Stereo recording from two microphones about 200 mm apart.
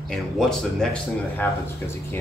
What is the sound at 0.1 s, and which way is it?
Speech, centre (ahead or behind).